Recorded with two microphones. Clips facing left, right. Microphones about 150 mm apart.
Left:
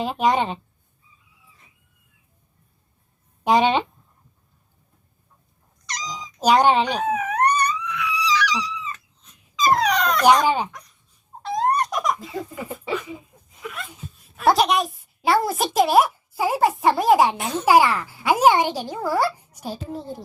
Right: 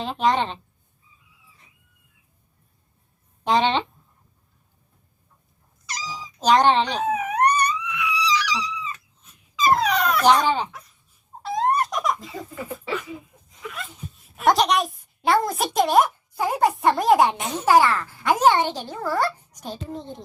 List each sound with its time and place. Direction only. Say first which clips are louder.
0.0 s a child's voice: left 1 dB; 10° left (ahead or behind)
3.4 s a child's voice: left 3 dB; 10° left (ahead or behind)
5.8 s cat: left 1 dB; 5° right (ahead or behind)
6.4 s a child's voice: left 1 dB; 10° left (ahead or behind)
7.0 s dog: even; 10° right (ahead or behind)
10.2 s a child's voice: left 2 dB; 10° left (ahead or behind)
10.7 s crying: even; 5° right (ahead or behind)
11.4 s baby laughter: even; centre (ahead or behind)
12.5 s speech: even; 15° left (ahead or behind)
13.6 s a sound: left 1 dB; centre (ahead or behind)
14.4 s a child's voice: left 1 dB; 5° left (ahead or behind)
17.3 s a child's voice: left 2 dB; 15° right (ahead or behind)
17.7 s a child's voice: left 1 dB; 10° left (ahead or behind)